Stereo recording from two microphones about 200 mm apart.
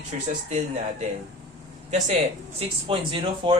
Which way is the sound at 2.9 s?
25° right (ahead or behind).